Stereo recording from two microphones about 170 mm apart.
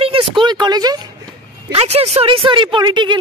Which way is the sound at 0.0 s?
30° right (ahead or behind).